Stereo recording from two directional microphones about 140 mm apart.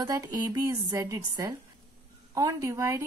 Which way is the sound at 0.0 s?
25° right (ahead or behind).